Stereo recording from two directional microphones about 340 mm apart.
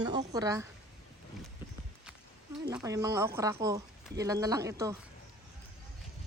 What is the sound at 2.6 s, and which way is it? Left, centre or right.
Speech, centre.